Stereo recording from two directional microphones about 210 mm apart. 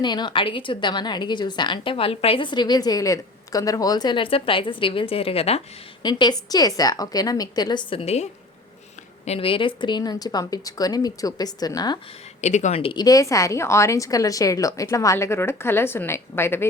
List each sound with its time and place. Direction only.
0.0 s a woman's voice: 20° left (ahead or behind)
12.4 s a woman's voice: 35° left (ahead or behind); by 16.6 s 10° left (ahead or behind)